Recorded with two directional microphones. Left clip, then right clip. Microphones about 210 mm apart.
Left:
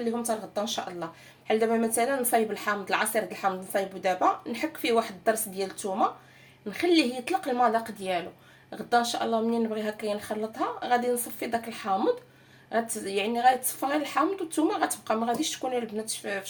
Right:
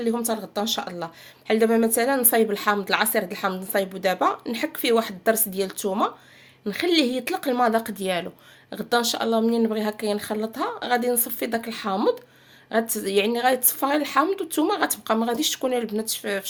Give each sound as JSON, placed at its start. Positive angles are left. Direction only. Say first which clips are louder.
{"t": 0.0, "sound": "a woman's voice", "louder": "right 4 dB", "side_deg": -50}